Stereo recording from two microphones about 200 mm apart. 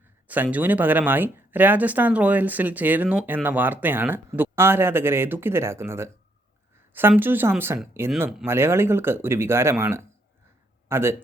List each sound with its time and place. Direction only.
0.3 s speech: 10° right (ahead or behind)
8.4 s a man's voice: 10° right (ahead or behind)